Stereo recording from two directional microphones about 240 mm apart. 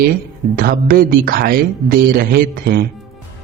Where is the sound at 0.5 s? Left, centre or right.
Right.